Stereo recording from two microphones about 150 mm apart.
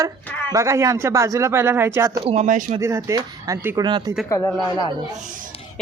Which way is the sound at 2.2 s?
50° right (ahead or behind).